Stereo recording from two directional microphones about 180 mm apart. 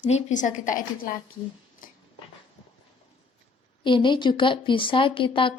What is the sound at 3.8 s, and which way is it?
Speech, 25° left (ahead or behind).